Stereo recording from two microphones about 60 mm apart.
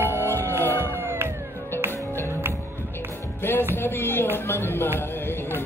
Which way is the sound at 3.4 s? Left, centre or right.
Left.